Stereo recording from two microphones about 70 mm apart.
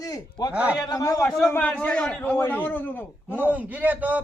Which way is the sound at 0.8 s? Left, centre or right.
Left.